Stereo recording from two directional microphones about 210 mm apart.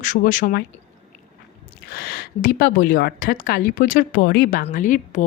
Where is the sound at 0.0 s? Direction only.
40° left (ahead or behind).